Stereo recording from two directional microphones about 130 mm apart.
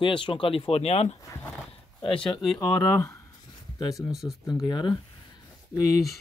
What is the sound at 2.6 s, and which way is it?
Speech, 25° left (ahead or behind).